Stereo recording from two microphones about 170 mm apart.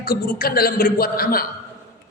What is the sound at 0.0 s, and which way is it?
A man's voice, 60° left (ahead or behind).